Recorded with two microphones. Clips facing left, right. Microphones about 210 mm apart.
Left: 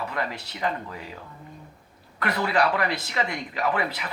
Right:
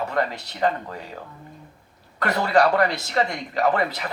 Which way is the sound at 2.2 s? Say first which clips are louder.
Right 4 dB; 45° right (ahead or behind).